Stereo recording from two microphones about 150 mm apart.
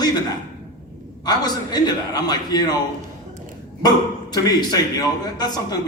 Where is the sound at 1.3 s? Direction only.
25° left (ahead or behind).